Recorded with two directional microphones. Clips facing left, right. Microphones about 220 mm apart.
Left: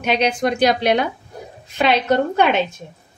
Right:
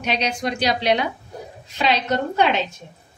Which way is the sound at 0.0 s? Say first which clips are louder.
Left 5 dB; 55° left (ahead or behind).